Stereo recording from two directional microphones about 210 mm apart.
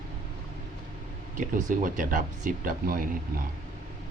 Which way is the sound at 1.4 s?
40° right (ahead or behind).